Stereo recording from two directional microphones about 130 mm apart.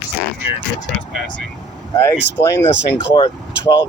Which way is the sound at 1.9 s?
20° left (ahead or behind).